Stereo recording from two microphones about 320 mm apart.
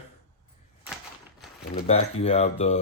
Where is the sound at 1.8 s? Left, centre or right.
Centre.